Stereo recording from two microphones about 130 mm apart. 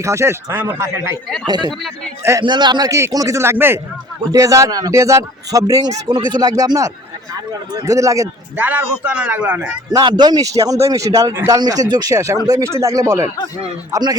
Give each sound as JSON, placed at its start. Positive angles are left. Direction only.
{"t": 0.0, "sound": "a man's voice", "side_deg": -20}
{"t": 1.5, "sound": "a man's voice", "side_deg": -35}
{"t": 8.5, "sound": "a man's voice", "side_deg": -15}
{"t": 9.9, "sound": "a man's voice", "side_deg": -35}